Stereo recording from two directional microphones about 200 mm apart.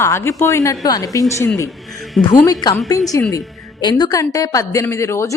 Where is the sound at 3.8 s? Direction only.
20° left (ahead or behind).